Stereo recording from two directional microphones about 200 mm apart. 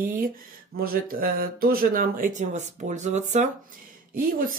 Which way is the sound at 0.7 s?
50° right (ahead or behind).